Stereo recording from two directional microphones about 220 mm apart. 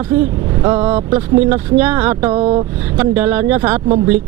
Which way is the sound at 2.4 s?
25° right (ahead or behind).